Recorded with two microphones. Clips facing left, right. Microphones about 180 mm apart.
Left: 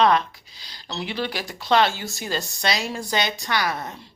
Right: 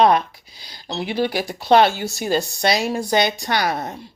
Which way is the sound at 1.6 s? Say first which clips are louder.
Right 5 dB; 60° right (ahead or behind).